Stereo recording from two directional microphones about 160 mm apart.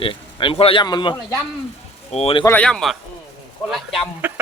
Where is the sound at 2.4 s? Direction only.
10° left (ahead or behind).